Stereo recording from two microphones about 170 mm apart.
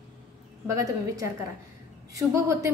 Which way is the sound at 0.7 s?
20° right (ahead or behind).